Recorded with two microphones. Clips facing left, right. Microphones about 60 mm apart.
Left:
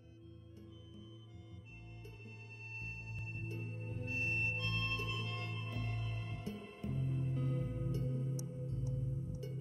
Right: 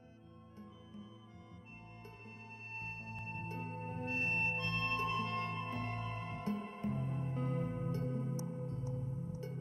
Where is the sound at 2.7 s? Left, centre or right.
Right.